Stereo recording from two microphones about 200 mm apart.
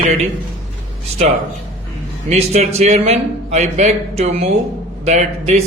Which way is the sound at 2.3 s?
35° right (ahead or behind).